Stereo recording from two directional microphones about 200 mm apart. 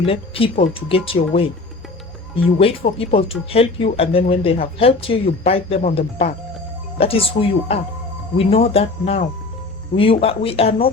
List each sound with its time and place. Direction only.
0.0 s speech: 30° left (ahead or behind)